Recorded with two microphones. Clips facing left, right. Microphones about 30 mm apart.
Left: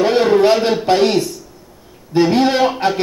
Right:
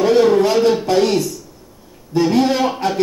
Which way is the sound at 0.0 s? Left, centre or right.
Left.